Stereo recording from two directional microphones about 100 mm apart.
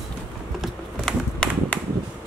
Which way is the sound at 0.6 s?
5° left (ahead or behind).